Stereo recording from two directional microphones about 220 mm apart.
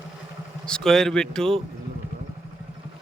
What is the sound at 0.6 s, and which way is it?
Speech, 5° left (ahead or behind).